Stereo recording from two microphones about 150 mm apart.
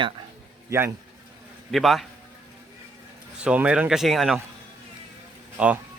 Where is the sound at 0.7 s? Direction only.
20° right (ahead or behind).